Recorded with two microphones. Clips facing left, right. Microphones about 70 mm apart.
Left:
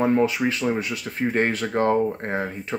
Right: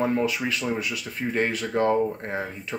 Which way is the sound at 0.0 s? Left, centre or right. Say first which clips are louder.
Left 4 dB; left.